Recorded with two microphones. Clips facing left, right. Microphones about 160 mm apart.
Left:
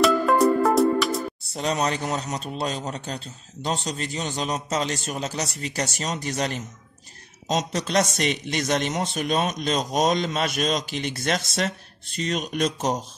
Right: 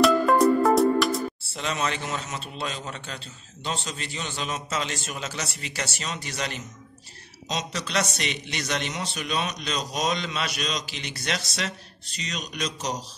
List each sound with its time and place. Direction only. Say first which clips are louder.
0.0 s music: even; centre (ahead or behind)
1.5 s a man's voice: left 6 dB; 40° left (ahead or behind)